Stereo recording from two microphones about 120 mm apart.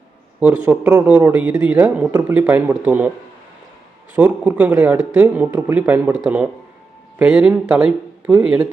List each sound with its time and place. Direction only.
0.3 s a man's voice: 15° right (ahead or behind)
4.1 s a man's voice: 15° right (ahead or behind)
7.2 s a man's voice: 10° right (ahead or behind)